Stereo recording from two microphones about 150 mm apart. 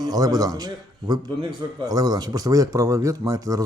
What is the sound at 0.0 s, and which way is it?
Speech, 25° right (ahead or behind).